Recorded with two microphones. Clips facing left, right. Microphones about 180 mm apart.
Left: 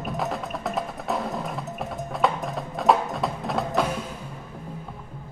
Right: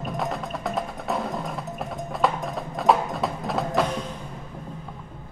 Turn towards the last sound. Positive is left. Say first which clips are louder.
# right 1 dB
turn(degrees=5)  # may be behind; listen again after turning